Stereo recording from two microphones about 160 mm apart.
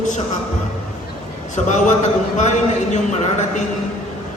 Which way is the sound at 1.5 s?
50° left (ahead or behind).